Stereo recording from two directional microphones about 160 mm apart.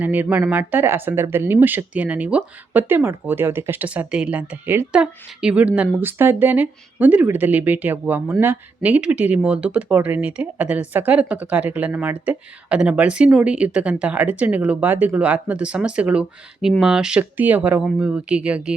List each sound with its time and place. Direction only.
0.0 s speech: 10° right (ahead or behind)